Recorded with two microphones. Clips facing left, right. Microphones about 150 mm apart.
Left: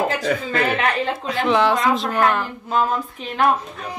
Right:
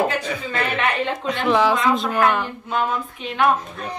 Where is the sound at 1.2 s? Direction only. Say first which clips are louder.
Even; centre (ahead or behind).